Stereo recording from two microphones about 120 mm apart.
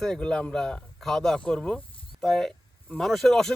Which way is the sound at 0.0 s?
5° left (ahead or behind).